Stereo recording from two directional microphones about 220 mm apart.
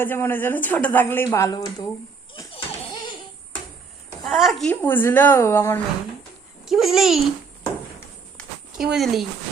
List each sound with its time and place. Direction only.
0.0 s a woman's voice: 10° left (ahead or behind)
2.3 s a sound: 15° left (ahead or behind)
4.2 s a woman's voice: centre (ahead or behind)
6.7 s a child's voice: centre (ahead or behind)
8.8 s a child's voice: centre (ahead or behind)